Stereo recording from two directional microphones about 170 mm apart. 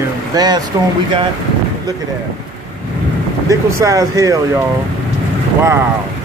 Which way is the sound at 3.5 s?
20° right (ahead or behind).